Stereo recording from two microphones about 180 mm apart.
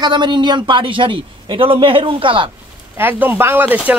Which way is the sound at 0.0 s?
25° right (ahead or behind).